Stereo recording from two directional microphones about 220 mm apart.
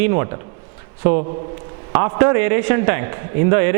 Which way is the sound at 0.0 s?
15° right (ahead or behind).